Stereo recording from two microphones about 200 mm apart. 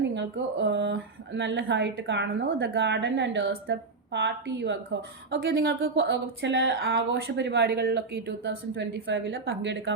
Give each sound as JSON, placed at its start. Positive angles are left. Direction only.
{"t": 0.0, "sound": "speech", "side_deg": -60}